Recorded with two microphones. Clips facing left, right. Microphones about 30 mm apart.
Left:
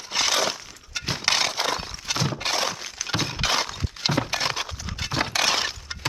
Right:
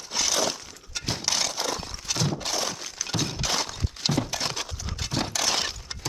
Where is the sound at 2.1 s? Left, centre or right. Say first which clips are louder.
Left 2 dB; centre.